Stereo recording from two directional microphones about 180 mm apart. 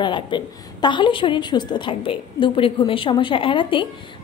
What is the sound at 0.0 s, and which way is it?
A woman's voice, 25° left (ahead or behind).